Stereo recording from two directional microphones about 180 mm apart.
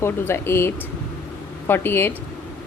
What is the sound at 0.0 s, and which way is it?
A woman's voice, 15° left (ahead or behind).